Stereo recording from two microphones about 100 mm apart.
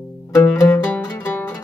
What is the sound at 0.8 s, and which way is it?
Zither, 15° left (ahead or behind).